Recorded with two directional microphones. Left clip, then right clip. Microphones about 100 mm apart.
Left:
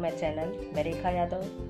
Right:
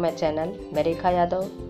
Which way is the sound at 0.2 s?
20° right (ahead or behind).